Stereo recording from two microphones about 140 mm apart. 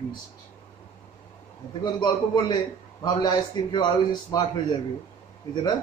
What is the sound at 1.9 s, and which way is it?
Speech, 30° left (ahead or behind).